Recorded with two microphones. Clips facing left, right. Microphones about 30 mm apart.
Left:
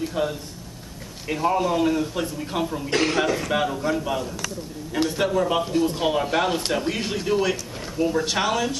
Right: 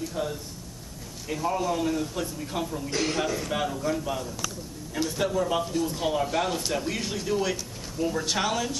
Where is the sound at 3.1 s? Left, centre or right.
Left.